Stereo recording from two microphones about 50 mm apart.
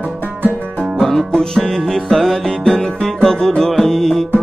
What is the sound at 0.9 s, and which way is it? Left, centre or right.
Music, centre.